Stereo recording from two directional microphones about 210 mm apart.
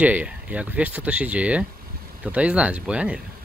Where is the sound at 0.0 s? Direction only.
5° right (ahead or behind).